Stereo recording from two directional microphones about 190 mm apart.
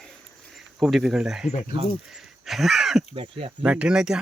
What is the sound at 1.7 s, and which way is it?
Speech, 25° right (ahead or behind).